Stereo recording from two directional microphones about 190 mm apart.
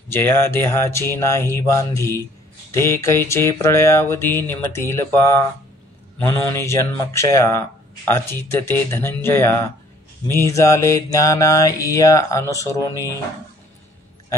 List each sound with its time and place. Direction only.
0.1 s mantra: 10° left (ahead or behind)